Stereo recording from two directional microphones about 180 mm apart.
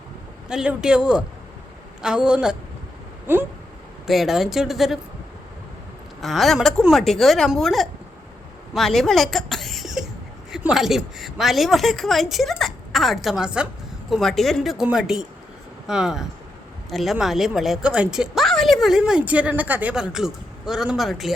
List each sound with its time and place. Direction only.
0.4 s a woman's voice: 5° right (ahead or behind)
3.3 s a sound: 10° right (ahead or behind)
4.0 s a woman's voice: centre (ahead or behind)
6.2 s a woman's voice: centre (ahead or behind)
8.7 s a sound: centre (ahead or behind)
10.5 s a woman's voice: 5° right (ahead or behind)